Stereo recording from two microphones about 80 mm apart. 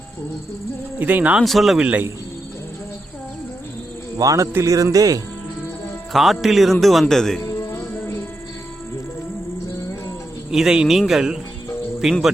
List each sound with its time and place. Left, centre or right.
0.9 s speech: centre
1.5 s a man's voice: centre
1.8 s speech: centre
4.2 s a man's voice: right
6.1 s a man's voice: centre
7.4 s music: left
10.5 s a man's voice: centre